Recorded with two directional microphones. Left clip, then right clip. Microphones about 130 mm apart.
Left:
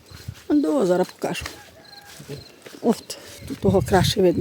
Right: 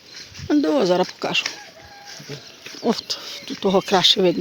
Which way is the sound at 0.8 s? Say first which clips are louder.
Right 2 dB; 20° left (ahead or behind).